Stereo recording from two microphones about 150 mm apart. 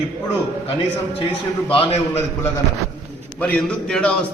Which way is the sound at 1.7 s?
35° left (ahead or behind).